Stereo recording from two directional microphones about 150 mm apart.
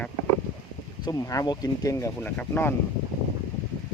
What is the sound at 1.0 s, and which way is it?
Speech, 25° left (ahead or behind).